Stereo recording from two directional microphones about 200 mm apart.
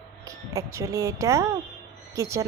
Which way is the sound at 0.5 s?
15° right (ahead or behind).